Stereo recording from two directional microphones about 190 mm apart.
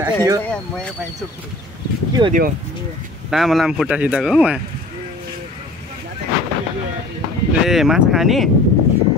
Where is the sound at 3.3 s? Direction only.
Centre (ahead or behind).